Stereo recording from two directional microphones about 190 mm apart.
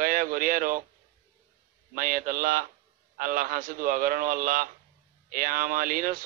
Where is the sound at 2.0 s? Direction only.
45° right (ahead or behind).